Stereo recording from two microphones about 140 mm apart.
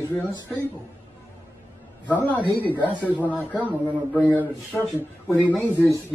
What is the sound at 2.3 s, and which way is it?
Speech, 15° left (ahead or behind).